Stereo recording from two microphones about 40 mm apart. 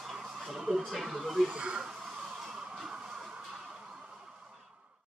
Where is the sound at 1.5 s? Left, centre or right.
Right.